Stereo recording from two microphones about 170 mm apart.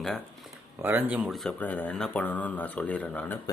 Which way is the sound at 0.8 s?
10° right (ahead or behind).